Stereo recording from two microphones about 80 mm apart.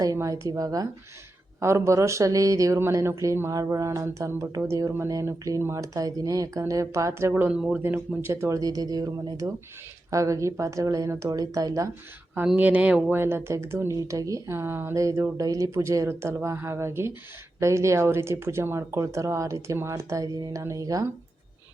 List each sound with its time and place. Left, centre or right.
0.2 s speech: right
1.6 s speech: right
7.4 s speech: centre
7.8 s speech: right
8.3 s speech: right
12.5 s speech: centre
13.1 s speech: right
13.9 s speech: right
14.5 s speech: right